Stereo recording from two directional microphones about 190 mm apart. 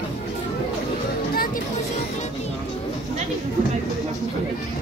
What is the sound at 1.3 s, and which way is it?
Music, 50° left (ahead or behind).